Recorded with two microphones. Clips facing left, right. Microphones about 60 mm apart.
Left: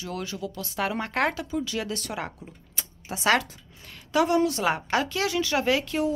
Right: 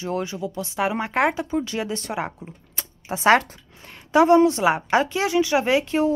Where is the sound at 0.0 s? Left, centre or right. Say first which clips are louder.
Right 6 dB; right.